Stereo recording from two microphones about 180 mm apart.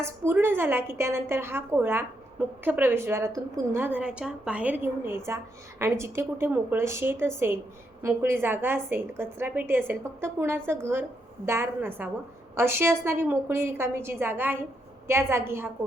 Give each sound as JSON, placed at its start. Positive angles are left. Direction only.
{"t": 0.0, "sound": "a woman's voice", "side_deg": -10}